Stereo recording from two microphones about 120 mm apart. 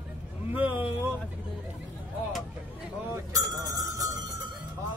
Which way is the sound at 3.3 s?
30° right (ahead or behind).